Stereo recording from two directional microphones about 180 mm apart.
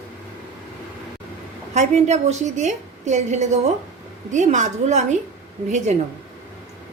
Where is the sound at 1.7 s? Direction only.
40° right (ahead or behind).